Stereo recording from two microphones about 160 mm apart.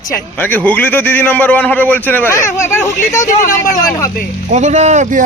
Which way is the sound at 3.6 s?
20° left (ahead or behind).